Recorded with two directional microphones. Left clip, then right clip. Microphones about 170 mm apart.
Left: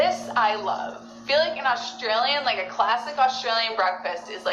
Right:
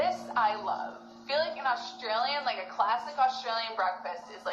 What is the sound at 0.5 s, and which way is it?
Speech, 25° left (ahead or behind).